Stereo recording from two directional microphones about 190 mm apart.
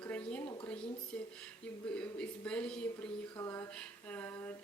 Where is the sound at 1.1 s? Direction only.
5° left (ahead or behind).